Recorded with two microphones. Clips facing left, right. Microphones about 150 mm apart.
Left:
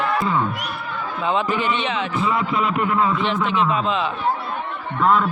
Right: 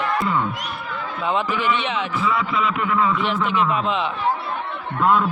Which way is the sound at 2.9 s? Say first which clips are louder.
Right 1 dB; 30° left (ahead or behind).